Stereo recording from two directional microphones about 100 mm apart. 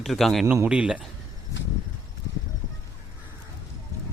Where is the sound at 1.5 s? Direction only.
30° left (ahead or behind).